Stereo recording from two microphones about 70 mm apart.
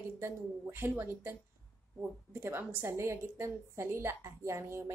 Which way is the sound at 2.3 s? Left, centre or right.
Right.